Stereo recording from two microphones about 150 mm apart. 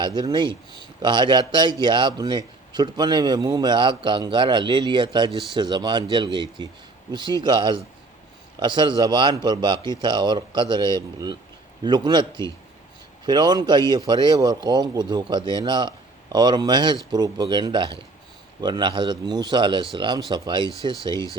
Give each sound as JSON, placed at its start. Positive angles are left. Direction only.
{"t": 0.0, "sound": "speech", "side_deg": -30}